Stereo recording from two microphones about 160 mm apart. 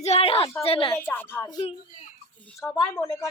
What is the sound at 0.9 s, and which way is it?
Speech, 15° left (ahead or behind).